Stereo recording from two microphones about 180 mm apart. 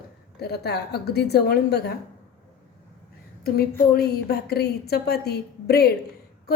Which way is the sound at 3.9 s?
60° left (ahead or behind).